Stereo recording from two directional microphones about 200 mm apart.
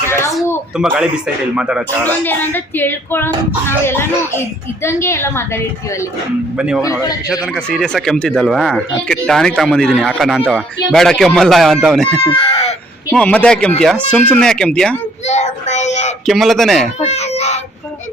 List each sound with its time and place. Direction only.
0.8 s speech: 5° right (ahead or behind)
2.0 s speech: 10° left (ahead or behind)
6.6 s speech: 5° right (ahead or behind)
12.2 s chicken: 25° left (ahead or behind)
13.1 s speech: 5° left (ahead or behind)
15.2 s speech: 35° left (ahead or behind)
16.2 s speech: centre (ahead or behind)
17.1 s a sound: 30° left (ahead or behind)